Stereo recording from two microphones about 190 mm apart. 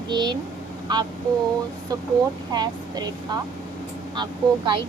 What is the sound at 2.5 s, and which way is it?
Speech, 20° right (ahead or behind).